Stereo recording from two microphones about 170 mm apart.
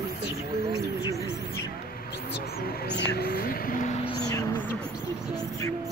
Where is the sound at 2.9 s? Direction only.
80° left; by 4.1 s 40° left (ahead or behind).